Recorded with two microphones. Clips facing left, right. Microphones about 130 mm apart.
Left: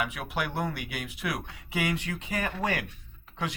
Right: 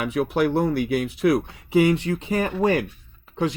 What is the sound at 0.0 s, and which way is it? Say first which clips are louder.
Speech: right 10 dB; 35° right (ahead or behind).